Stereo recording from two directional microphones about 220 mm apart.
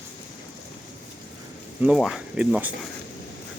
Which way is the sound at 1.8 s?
Centre (ahead or behind).